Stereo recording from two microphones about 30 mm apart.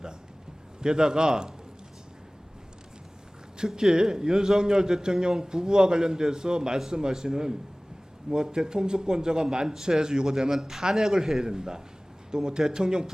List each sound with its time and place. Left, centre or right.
0.8 s speech: right
3.7 s speech: centre